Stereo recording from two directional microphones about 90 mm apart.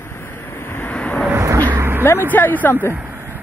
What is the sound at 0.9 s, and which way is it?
Vehicle, 15° left (ahead or behind).